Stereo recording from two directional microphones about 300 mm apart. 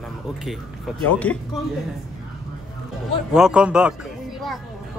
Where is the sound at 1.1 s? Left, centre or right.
Centre.